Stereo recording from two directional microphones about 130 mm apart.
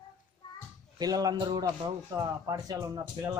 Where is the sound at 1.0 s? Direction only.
30° right (ahead or behind).